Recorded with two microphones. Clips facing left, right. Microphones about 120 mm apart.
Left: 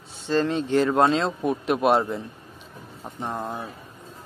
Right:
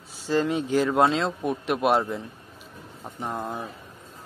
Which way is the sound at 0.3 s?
10° right (ahead or behind).